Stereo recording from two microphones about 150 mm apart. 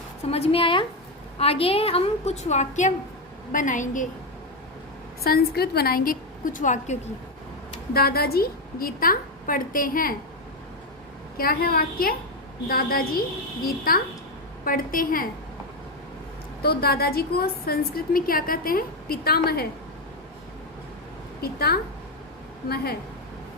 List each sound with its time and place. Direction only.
0.3 s a woman's voice: 40° left (ahead or behind); by 4.0 s 60° left (ahead or behind)
5.2 s a woman's voice: 90° left; by 7.0 s 55° left (ahead or behind)
7.9 s a woman's voice: 90° left; by 10.2 s 70° left (ahead or behind)
11.3 s a woman's voice: 80° left
14.6 s a woman's voice: 70° left (ahead or behind)
16.6 s a woman's voice: 90° left
21.4 s a woman's voice: 90° left